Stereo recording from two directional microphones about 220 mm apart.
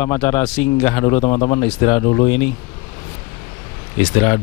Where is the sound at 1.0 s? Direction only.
25° left (ahead or behind).